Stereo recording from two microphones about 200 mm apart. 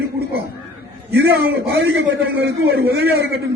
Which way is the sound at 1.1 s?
55° right (ahead or behind).